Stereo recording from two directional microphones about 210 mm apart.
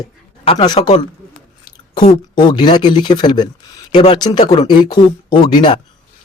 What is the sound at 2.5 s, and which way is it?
Speech, 20° left (ahead or behind).